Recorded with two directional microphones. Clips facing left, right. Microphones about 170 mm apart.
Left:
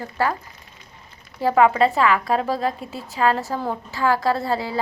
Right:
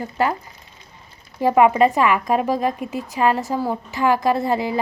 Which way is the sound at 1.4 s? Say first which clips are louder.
Right 2 dB; 15° right (ahead or behind).